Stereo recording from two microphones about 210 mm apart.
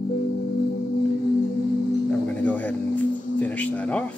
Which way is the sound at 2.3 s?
5° left (ahead or behind).